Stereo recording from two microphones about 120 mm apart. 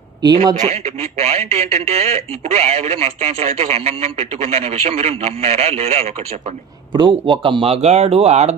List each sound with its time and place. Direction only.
0.6 s speech: 65° right (ahead or behind)
6.9 s speech: 40° right (ahead or behind); by 8.5 s 65° right (ahead or behind)